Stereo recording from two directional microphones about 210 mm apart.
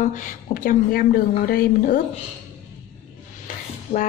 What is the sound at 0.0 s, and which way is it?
A woman's voice, 40° left (ahead or behind).